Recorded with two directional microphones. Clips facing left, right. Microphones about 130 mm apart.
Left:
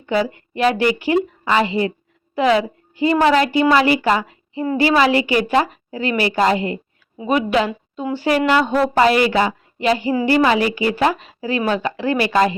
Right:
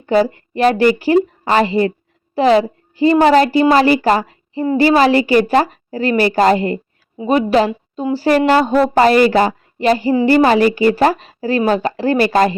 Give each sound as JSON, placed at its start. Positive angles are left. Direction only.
{"t": 0.0, "sound": "a woman's voice", "side_deg": -40}